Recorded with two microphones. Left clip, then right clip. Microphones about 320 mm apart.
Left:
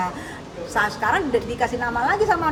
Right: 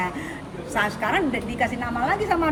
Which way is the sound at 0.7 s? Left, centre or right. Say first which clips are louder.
Left 2 dB; centre.